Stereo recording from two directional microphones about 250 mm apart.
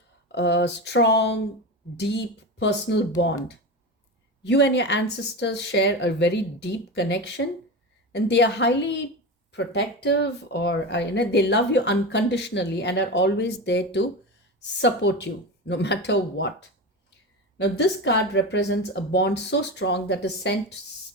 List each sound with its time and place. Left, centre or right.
0.3 s speech: left
4.4 s speech: left
17.6 s speech: left